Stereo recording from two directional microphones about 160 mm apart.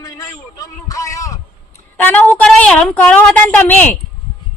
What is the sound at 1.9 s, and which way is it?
A man's voice, 10° left (ahead or behind).